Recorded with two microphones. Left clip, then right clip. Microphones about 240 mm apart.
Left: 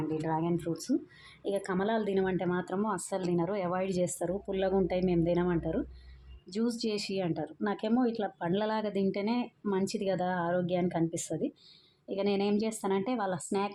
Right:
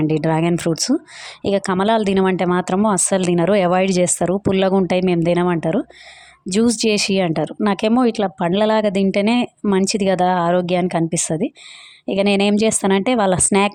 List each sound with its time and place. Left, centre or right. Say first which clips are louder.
0.1 s speech: right 14 dB; right